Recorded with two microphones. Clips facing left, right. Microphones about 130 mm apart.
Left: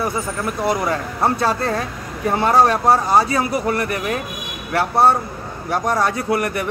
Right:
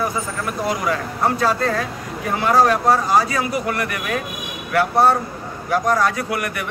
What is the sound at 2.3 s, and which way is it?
Speech, 30° left (ahead or behind).